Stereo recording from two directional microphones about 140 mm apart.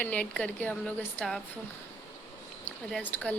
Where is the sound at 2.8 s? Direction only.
10° left (ahead or behind).